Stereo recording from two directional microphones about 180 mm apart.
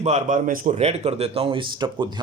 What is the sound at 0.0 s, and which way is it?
Speech, 40° right (ahead or behind).